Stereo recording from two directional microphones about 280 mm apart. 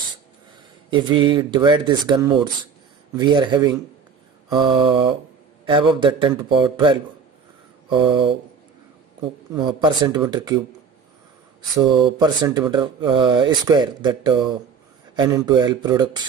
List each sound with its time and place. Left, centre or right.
0.8 s speech: centre
11.7 s speech: centre